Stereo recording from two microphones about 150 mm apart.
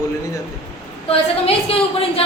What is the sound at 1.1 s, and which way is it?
A woman's voice, 40° left (ahead or behind).